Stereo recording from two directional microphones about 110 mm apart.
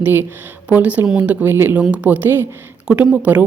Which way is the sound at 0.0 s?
20° right (ahead or behind).